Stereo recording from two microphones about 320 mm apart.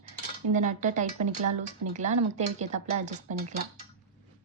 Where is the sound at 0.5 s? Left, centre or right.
Right.